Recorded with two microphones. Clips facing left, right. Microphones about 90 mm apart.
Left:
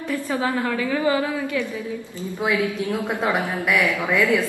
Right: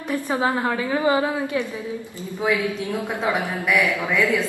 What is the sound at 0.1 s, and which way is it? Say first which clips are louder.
A woman's voice: right 2 dB; 20° right (ahead or behind).